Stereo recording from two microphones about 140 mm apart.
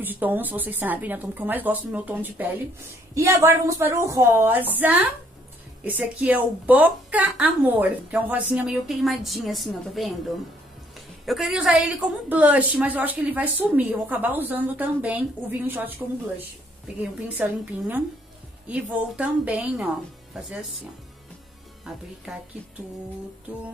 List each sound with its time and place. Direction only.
0.0 s a woman's voice: 15° right (ahead or behind)
11.2 s a woman's voice: centre (ahead or behind)